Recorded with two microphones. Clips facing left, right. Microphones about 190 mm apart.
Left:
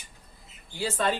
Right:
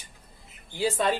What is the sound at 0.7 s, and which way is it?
Speech, 15° right (ahead or behind).